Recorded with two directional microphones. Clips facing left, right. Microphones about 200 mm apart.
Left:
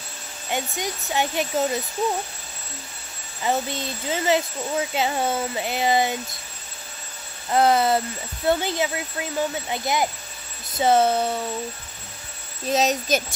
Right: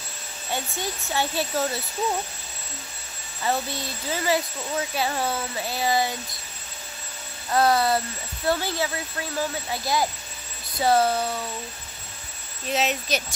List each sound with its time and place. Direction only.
0.5 s speech: 15° left (ahead or behind)
3.4 s speech: 20° left (ahead or behind)
7.5 s speech: 20° left (ahead or behind)
12.6 s a child's voice: 40° left (ahead or behind)